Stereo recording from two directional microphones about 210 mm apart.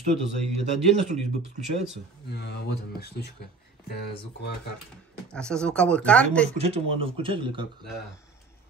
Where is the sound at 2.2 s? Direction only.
50° left (ahead or behind).